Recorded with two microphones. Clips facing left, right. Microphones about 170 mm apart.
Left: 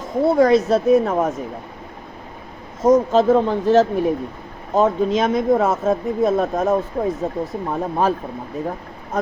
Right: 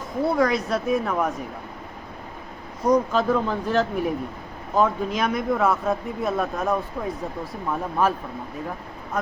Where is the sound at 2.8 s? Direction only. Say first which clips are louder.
Left 6 dB; 25° left (ahead or behind).